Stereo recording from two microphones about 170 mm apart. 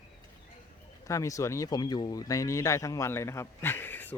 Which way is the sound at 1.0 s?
20° left (ahead or behind).